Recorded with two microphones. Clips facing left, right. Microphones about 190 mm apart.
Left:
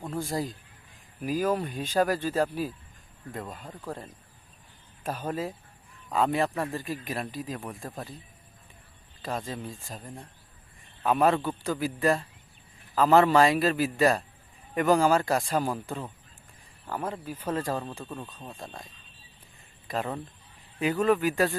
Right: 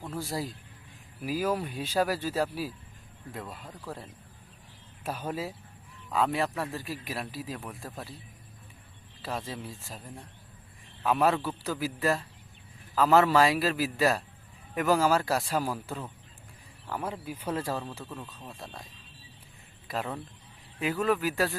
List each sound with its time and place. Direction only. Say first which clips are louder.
0.1 s speech: left 3 dB; centre (ahead or behind)
3.6 s speech: left 3 dB; 10° left (ahead or behind)
5.0 s a man's voice: left 2 dB; 10° right (ahead or behind)
9.2 s a man's voice: left 2 dB; 5° right (ahead or behind)
11.0 s a man's voice: left 2 dB; centre (ahead or behind)
18.0 s speech: left 3 dB; 20° left (ahead or behind)
19.9 s a man's voice: left 2 dB; centre (ahead or behind)